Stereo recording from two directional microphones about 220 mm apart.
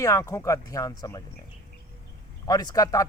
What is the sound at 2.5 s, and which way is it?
Speech, 15° left (ahead or behind).